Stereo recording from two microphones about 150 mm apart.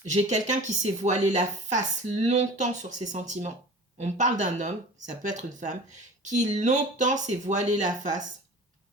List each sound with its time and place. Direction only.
0.1 s a woman's voice: 50° right (ahead or behind)